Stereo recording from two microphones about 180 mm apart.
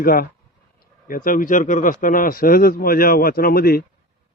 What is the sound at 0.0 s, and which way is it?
Speech, 55° left (ahead or behind).